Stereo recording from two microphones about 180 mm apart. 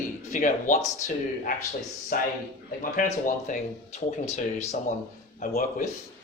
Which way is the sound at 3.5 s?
45° left (ahead or behind).